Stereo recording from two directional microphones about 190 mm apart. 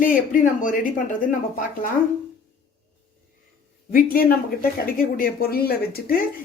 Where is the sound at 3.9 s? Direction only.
50° left (ahead or behind).